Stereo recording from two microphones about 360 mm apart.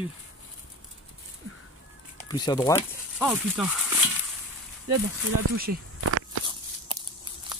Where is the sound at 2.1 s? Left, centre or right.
Centre.